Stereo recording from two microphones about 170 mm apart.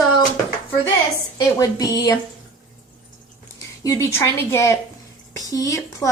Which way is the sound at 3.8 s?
15° left (ahead or behind).